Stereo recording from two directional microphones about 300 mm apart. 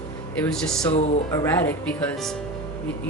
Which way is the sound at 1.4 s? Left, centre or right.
Centre.